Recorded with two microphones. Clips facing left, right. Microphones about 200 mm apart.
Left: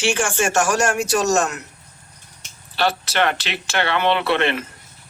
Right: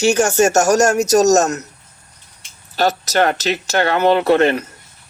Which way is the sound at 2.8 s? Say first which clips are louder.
Right 4 dB; 40° right (ahead or behind).